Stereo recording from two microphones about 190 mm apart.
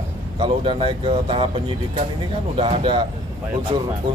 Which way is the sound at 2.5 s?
30° right (ahead or behind).